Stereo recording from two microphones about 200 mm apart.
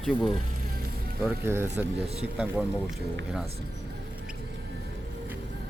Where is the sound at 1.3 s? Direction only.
10° right (ahead or behind).